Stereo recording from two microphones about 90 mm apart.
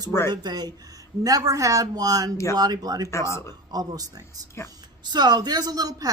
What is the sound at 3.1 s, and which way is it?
Speech, 30° left (ahead or behind).